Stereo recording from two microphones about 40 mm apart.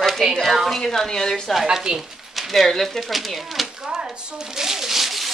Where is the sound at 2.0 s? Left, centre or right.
Centre.